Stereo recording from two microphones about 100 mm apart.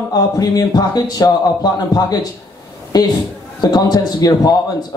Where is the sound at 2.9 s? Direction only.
45° left (ahead or behind).